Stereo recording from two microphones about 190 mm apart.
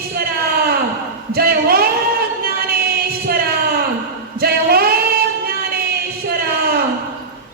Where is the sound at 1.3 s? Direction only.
55° right (ahead or behind).